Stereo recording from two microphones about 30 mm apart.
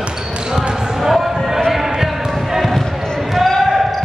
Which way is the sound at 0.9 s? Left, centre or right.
Centre.